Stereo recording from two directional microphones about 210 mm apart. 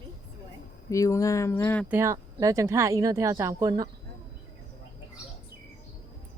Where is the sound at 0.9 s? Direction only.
15° left (ahead or behind).